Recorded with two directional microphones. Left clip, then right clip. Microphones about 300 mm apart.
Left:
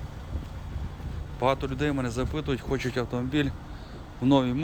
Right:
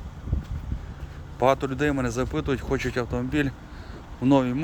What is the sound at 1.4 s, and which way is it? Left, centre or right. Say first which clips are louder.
Speech: right 4 dB; centre.